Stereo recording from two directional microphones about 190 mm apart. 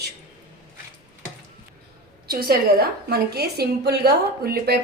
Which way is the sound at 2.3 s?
55° right (ahead or behind).